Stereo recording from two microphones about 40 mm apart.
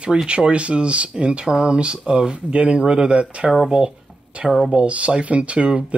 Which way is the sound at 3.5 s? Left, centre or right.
Centre.